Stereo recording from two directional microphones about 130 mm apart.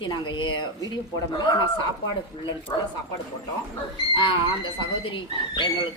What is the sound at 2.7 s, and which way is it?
Speech, 30° left (ahead or behind).